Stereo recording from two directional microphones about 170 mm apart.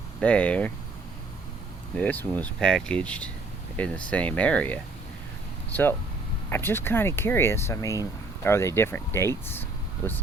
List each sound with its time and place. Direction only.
0.2 s speech: 5° left (ahead or behind)
2.0 s speech: 10° left (ahead or behind)
6.5 s speech: 15° left (ahead or behind)